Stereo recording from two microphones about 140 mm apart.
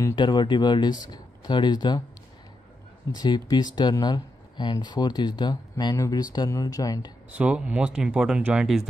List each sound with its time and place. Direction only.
0.1 s speech: 30° left (ahead or behind)
3.1 s speech: 30° left (ahead or behind)
7.3 s speech: 10° right (ahead or behind)